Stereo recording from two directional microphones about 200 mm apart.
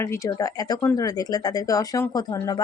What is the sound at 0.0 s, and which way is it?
A woman's voice, 15° left (ahead or behind).